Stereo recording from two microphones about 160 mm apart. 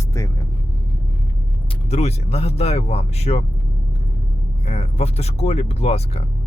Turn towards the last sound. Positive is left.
turn(degrees=40)  # may be behind; listen again after turning